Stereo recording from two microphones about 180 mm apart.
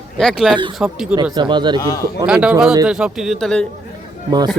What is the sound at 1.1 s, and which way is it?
Speech, 25° right (ahead or behind).